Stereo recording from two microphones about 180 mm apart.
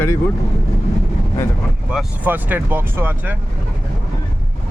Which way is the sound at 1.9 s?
5° right (ahead or behind).